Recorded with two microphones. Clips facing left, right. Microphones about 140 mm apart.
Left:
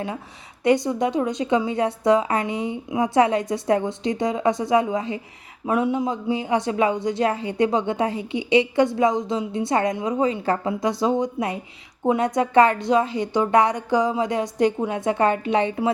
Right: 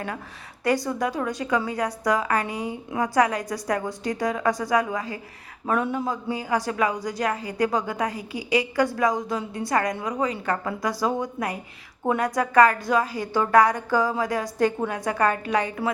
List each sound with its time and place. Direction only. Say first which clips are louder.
0.6 s a man's voice: left 4 dB; 20° left (ahead or behind)